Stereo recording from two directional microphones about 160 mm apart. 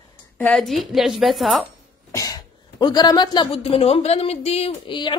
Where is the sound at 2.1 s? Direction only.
20° left (ahead or behind).